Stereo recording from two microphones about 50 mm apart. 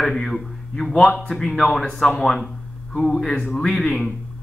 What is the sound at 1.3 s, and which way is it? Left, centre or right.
Speech, centre.